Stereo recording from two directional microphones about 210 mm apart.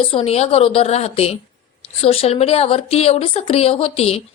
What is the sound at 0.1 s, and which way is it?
A woman's voice, 30° left (ahead or behind).